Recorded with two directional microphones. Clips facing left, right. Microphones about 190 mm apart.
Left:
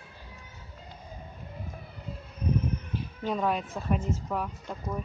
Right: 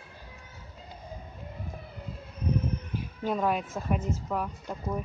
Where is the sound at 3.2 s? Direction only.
5° right (ahead or behind).